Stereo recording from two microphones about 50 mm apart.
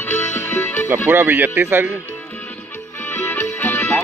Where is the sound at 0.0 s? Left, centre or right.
Left.